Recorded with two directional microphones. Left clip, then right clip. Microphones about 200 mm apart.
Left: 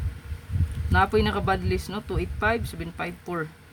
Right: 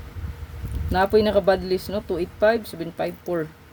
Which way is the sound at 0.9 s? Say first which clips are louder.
Right 4 dB; 15° left (ahead or behind).